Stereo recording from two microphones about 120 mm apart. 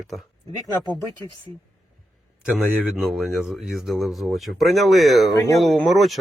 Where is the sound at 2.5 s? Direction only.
5° right (ahead or behind).